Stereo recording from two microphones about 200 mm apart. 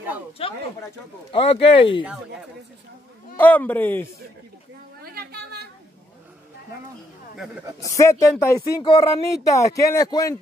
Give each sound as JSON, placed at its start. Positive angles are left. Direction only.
{"t": 0.4, "sound": "speech", "side_deg": 30}
{"t": 3.3, "sound": "a man's voice", "side_deg": 10}
{"t": 5.0, "sound": "a sound", "side_deg": -50}
{"t": 7.8, "sound": "a man's voice", "side_deg": 15}
{"t": 8.5, "sound": "a man's voice", "side_deg": 25}